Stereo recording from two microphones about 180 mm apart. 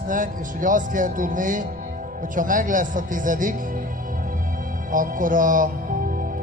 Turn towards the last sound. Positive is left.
turn(degrees=-50)  # may be behind; listen again after turning